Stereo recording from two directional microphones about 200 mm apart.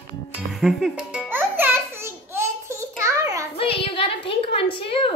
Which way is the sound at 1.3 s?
10° right (ahead or behind).